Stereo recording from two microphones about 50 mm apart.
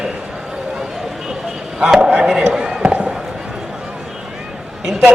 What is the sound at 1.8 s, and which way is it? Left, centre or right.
Speech, centre.